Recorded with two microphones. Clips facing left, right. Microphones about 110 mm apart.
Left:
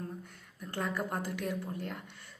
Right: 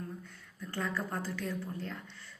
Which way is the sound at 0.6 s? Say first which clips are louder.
Left 1 dB; 15° left (ahead or behind).